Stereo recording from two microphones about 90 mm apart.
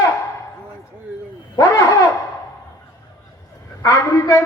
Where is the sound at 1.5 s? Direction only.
40° left (ahead or behind).